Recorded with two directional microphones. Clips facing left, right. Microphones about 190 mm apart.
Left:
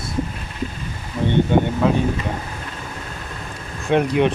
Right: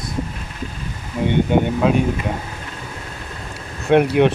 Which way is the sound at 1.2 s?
10° right (ahead or behind).